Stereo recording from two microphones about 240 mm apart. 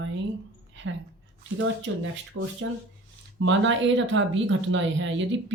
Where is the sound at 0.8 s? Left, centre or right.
Right.